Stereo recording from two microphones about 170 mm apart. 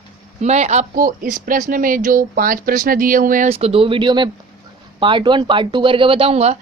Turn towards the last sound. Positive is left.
turn(degrees=-40)  # may be behind; listen again after turning